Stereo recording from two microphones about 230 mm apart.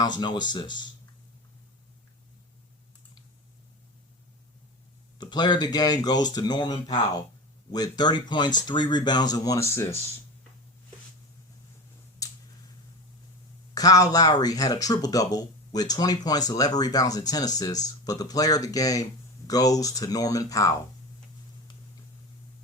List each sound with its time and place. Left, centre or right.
0.0 s speech: centre
5.1 s speech: centre
13.7 s speech: centre